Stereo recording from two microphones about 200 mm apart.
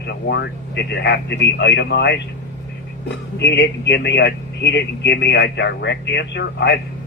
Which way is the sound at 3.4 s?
60° left (ahead or behind).